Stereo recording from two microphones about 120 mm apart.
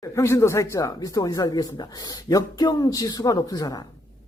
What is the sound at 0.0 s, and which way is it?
A man's voice, 25° left (ahead or behind).